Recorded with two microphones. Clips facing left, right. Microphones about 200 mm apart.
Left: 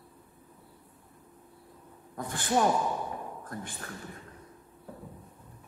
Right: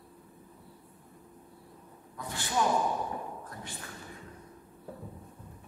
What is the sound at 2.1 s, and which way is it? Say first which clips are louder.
Speech: left 5 dB; 50° left (ahead or behind).